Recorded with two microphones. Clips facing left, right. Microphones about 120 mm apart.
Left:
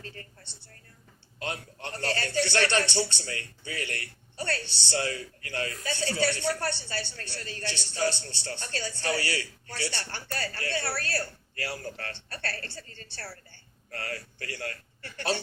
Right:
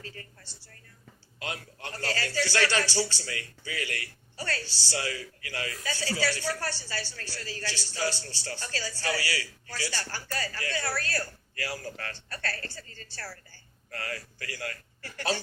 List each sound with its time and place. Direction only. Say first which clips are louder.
1.4 s a man's voice: left 2 dB; 30° left (ahead or behind)
10.3 s speech: left 1 dB; 35° left (ahead or behind)
13.9 s speech: even; 35° left (ahead or behind)